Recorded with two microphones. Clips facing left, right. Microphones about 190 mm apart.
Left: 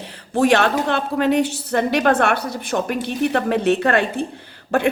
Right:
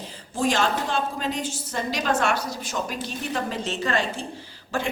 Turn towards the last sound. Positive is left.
turn(degrees=60)  # may be behind; listen again after turning